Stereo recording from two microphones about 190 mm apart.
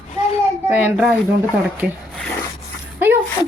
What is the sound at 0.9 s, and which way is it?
Speech, 10° right (ahead or behind).